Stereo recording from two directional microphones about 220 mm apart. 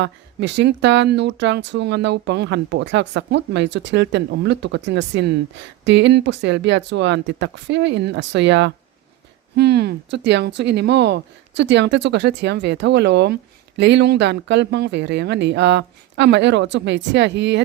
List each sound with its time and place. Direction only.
0.0 s speech: 55° right (ahead or behind)